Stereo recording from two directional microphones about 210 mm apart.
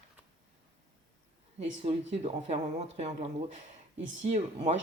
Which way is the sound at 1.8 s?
30° right (ahead or behind).